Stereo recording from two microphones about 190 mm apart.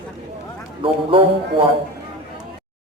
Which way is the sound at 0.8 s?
30° right (ahead or behind).